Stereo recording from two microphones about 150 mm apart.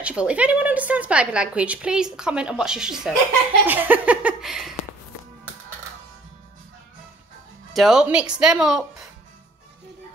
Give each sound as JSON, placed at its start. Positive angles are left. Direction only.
{"t": 0.0, "sound": "a woman's voice", "side_deg": -10}
{"t": 7.7, "sound": "speech", "side_deg": 0}